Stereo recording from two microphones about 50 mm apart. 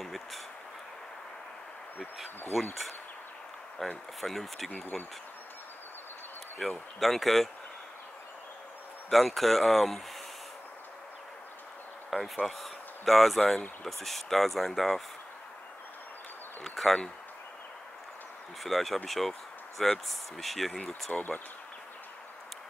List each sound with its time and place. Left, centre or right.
0.0 s a sound: centre
2.5 s speech: centre
3.8 s speech: centre
6.6 s speech: centre
9.1 s speech: centre
12.1 s speech: centre
16.6 s speech: centre
18.6 s speech: centre
21.1 s speech: left